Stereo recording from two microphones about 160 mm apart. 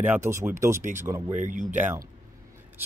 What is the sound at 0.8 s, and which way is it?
Speech, 50° right (ahead or behind).